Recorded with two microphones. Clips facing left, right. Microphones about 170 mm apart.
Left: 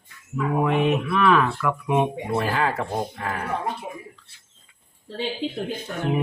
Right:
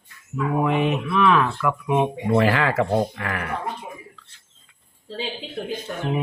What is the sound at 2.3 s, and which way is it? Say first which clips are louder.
Speech: right 5 dB; 90° right.